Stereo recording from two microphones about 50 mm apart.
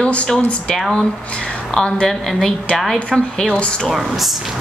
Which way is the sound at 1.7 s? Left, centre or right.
Centre.